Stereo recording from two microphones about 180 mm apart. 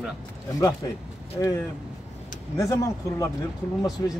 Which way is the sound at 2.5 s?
20° left (ahead or behind).